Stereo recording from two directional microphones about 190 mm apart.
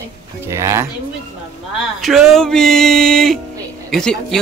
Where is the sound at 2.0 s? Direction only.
Centre (ahead or behind).